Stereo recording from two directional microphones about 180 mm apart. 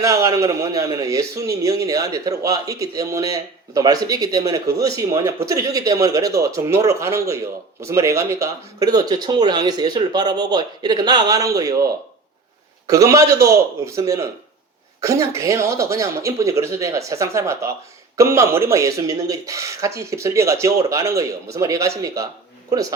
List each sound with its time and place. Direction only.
0.0 s a man's voice: 20° right (ahead or behind)